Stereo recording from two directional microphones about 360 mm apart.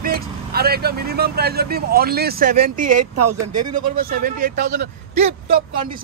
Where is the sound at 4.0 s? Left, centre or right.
Right.